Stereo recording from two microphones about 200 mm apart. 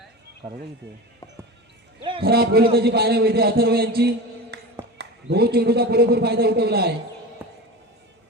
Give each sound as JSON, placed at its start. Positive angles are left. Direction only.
{"t": 2.2, "sound": "a man's voice", "side_deg": -50}
{"t": 4.5, "sound": "a sound", "side_deg": -55}
{"t": 4.9, "sound": "a man's voice", "side_deg": -55}